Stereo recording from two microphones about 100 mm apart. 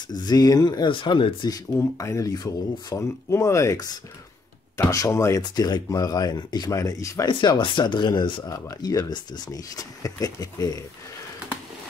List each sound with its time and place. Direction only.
0.1 s speech: 40° left (ahead or behind)
0.9 s speech: 55° left (ahead or behind)
1.7 s speech: 30° left (ahead or behind)
4.9 s speech: 30° left (ahead or behind)
5.4 s speech: 40° left (ahead or behind)
7.2 s speech: 55° left (ahead or behind)
8.5 s speech: 35° left (ahead or behind)